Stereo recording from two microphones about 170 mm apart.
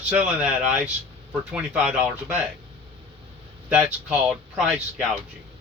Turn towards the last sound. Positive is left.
turn(degrees=0)  # may be behind; listen again after turning